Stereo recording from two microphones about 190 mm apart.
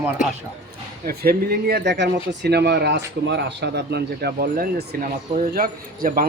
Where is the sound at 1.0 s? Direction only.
55° right (ahead or behind).